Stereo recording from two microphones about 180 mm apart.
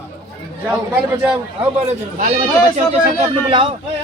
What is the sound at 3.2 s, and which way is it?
Speech, 30° right (ahead or behind).